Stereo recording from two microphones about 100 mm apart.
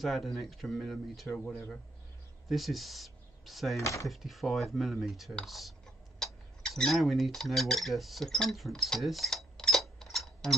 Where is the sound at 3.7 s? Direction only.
30° left (ahead or behind).